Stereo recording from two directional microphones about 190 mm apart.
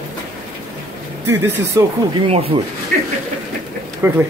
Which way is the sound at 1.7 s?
20° right (ahead or behind).